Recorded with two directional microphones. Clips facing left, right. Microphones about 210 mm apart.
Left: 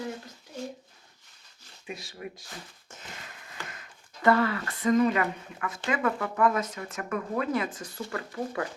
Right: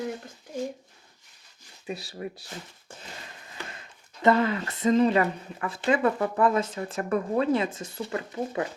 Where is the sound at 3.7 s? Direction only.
25° right (ahead or behind).